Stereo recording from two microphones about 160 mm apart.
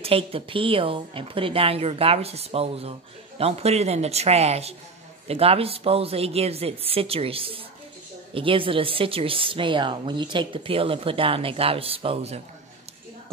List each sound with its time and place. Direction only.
0.0 s speech: 35° right (ahead or behind)